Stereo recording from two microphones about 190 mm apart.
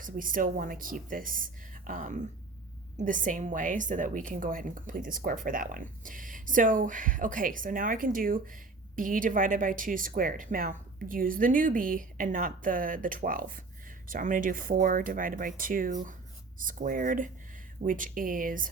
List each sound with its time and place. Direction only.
0.0 s a woman's voice: 45° right (ahead or behind)